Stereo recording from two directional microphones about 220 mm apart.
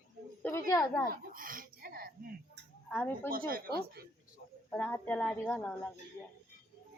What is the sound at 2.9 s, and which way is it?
Speech, 10° left (ahead or behind).